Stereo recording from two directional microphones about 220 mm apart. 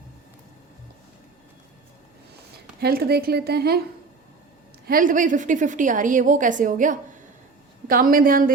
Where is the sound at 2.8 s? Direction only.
45° right (ahead or behind).